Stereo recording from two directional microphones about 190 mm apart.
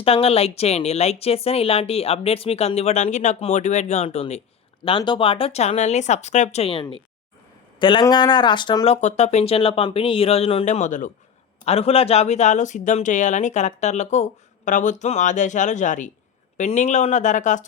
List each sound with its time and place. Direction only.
0.0 s speech: 30° left (ahead or behind)